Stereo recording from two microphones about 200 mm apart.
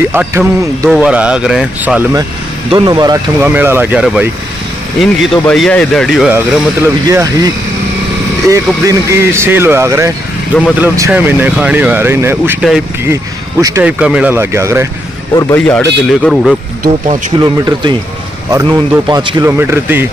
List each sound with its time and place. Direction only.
0.1 s speech: 10° right (ahead or behind)
2.7 s speech: 20° right (ahead or behind); by 6.6 s 5° right (ahead or behind)
7.1 s speech: 15° right (ahead or behind)
15.3 s speech: 10° left (ahead or behind)
17.4 s speech: 20° right (ahead or behind)